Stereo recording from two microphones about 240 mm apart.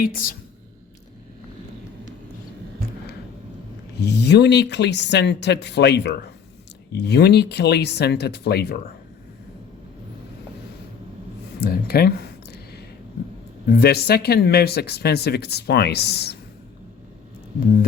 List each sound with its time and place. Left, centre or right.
4.0 s speech: left
11.6 s a sound: left
13.7 s speech: left